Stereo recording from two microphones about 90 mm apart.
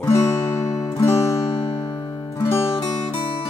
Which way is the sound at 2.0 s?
50° left (ahead or behind).